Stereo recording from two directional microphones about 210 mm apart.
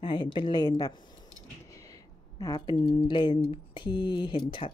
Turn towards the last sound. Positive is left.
turn(degrees=20)  # may be behind; listen again after turning